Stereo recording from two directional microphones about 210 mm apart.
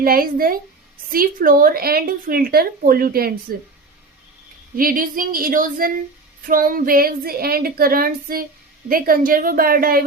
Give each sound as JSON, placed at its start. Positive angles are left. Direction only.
{"t": 0.0, "sound": "a woman's voice", "side_deg": -45}
{"t": 4.8, "sound": "female singing", "side_deg": -40}
{"t": 6.5, "sound": "a woman's voice", "side_deg": -40}